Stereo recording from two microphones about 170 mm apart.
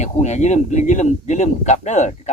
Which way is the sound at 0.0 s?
40° left (ahead or behind).